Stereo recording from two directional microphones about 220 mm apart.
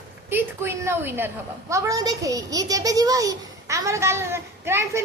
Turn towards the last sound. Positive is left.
turn(degrees=-10)  # may be behind; listen again after turning